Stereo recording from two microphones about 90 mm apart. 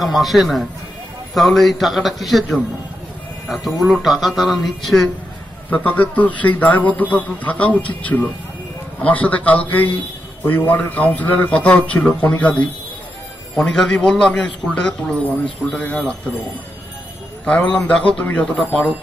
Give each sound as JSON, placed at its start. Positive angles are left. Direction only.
{"t": 0.0, "sound": "speech", "side_deg": 0}
{"t": 5.7, "sound": "a man's voice", "side_deg": 20}
{"t": 17.5, "sound": "speech", "side_deg": 15}